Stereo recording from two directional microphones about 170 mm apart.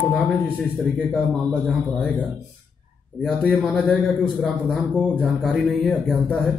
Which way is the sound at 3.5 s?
Centre (ahead or behind).